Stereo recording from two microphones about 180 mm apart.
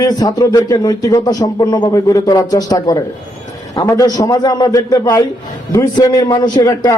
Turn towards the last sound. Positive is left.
turn(degrees=20)  # may be behind; listen again after turning